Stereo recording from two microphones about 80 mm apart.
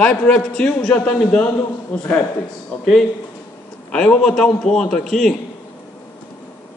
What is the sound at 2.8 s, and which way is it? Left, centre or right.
A man's voice, centre.